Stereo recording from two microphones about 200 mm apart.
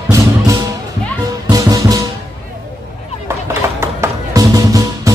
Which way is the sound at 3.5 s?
10° right (ahead or behind).